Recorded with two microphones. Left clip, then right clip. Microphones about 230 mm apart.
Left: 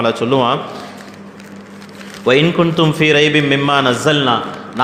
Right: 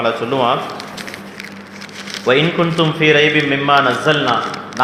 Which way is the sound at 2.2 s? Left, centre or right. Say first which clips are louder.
Left 2 dB; left.